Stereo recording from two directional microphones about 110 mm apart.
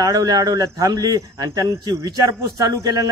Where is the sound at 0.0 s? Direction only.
40° right (ahead or behind).